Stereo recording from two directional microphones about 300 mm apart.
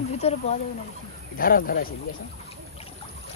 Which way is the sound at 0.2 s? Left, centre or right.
Left.